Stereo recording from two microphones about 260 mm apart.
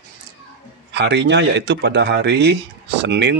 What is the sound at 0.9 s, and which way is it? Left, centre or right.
Speech, right.